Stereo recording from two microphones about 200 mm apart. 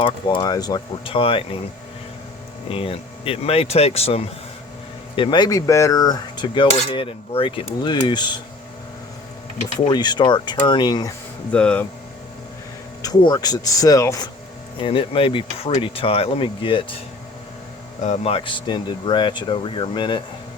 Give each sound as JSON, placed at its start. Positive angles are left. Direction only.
{"t": 0.0, "sound": "cutlery", "side_deg": 20}
{"t": 2.6, "sound": "cutlery", "side_deg": 30}
{"t": 9.9, "sound": "cutlery", "side_deg": 20}
{"t": 11.5, "sound": "speech", "side_deg": 5}
{"t": 13.0, "sound": "speech", "side_deg": 20}
{"t": 14.8, "sound": "cutlery", "side_deg": 25}
{"t": 18.0, "sound": "cutlery", "side_deg": 35}